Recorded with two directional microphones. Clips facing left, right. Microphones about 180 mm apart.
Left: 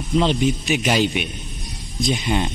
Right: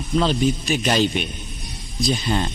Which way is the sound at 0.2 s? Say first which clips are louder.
Even; 20° left (ahead or behind).